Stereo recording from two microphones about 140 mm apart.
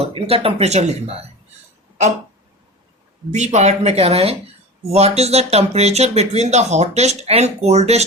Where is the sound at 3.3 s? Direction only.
55° right (ahead or behind).